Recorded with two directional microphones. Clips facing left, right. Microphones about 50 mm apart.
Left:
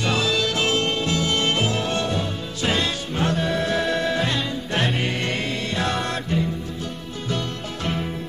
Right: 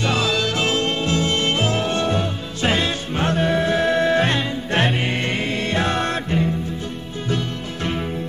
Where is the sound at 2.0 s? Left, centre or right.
Right.